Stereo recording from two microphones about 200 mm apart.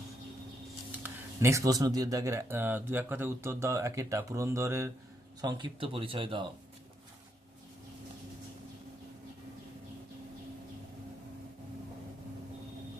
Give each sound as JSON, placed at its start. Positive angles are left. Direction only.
{"t": 1.0, "sound": "speech", "side_deg": -15}